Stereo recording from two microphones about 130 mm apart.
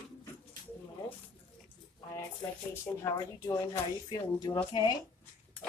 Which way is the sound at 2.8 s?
25° left (ahead or behind).